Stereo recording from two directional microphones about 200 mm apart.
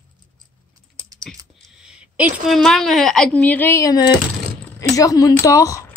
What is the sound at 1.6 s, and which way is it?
A woman's voice, 5° right (ahead or behind).